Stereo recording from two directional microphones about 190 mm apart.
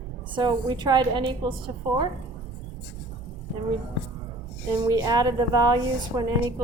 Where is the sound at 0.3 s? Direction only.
20° right (ahead or behind).